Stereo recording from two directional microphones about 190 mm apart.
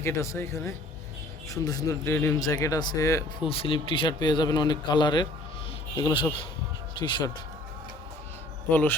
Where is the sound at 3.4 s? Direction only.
30° left (ahead or behind).